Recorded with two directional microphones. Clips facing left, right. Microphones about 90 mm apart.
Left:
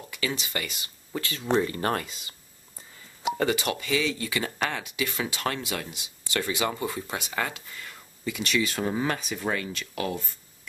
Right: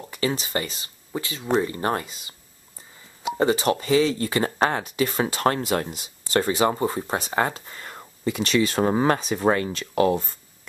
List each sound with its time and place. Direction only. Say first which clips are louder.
0.0 s speech: right 6 dB; 35° right (ahead or behind)
1.1 s speech: right 2 dB; 20° right (ahead or behind)
3.3 s speech: right 8 dB; 30° right (ahead or behind)